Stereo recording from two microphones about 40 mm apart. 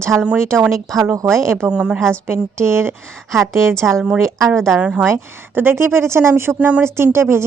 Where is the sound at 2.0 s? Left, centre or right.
Right.